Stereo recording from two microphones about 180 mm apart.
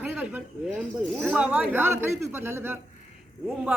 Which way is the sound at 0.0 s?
10° right (ahead or behind).